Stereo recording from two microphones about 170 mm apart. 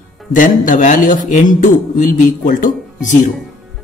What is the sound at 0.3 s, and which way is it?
A man's voice, 50° left (ahead or behind).